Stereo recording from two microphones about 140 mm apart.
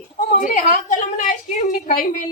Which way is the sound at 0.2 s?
80° left.